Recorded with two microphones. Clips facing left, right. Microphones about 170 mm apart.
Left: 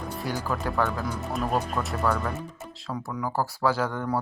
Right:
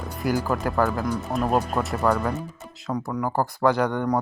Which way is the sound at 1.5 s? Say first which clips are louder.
Right 4 dB; 40° right (ahead or behind).